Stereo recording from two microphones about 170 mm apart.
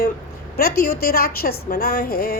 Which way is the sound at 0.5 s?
65° left (ahead or behind).